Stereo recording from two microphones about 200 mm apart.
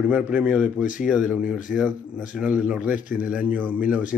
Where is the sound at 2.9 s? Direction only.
40° left (ahead or behind).